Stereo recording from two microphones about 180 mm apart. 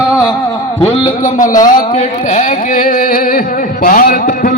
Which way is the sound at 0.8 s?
45° left (ahead or behind).